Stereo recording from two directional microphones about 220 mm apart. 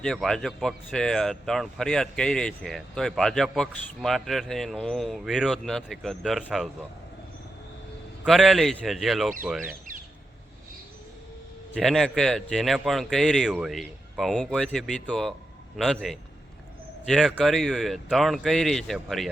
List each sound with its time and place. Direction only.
0.0 s speech: centre (ahead or behind)
8.2 s speech: centre (ahead or behind)
11.7 s speech: centre (ahead or behind)